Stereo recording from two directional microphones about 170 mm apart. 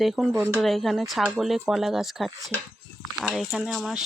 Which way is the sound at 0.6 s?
Centre (ahead or behind).